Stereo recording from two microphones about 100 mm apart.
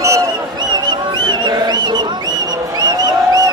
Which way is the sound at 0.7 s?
50° right (ahead or behind).